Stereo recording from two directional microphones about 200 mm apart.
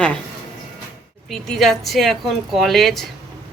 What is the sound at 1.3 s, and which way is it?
Speech, centre (ahead or behind).